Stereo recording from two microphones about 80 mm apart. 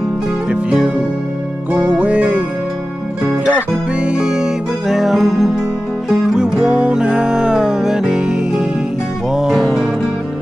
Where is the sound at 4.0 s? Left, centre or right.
Centre.